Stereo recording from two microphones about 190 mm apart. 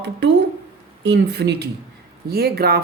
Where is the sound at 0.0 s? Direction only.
65° right (ahead or behind).